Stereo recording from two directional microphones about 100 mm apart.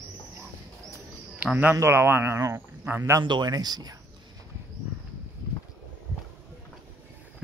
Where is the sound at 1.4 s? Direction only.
15° right (ahead or behind).